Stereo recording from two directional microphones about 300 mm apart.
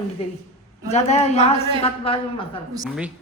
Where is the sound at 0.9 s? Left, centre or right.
Left.